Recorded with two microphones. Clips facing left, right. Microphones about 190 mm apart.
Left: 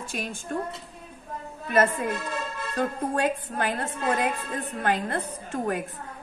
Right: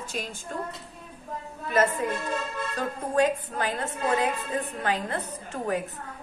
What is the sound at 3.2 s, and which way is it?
A woman's voice, 55° left (ahead or behind).